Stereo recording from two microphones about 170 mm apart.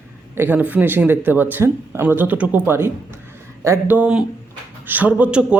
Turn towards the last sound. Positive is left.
turn(degrees=-5)  # may be behind; listen again after turning